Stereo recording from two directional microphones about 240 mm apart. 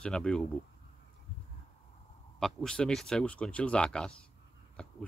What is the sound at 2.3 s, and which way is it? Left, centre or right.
Speech, centre.